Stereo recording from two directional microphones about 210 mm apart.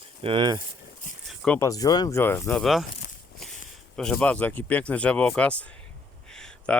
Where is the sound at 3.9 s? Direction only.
5° left (ahead or behind).